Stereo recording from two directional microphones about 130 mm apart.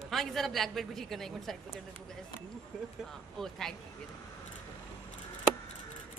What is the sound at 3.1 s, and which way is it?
Speech, 5° left (ahead or behind).